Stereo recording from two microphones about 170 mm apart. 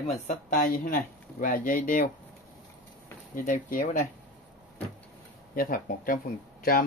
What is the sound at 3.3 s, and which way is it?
Speech, 50° left (ahead or behind).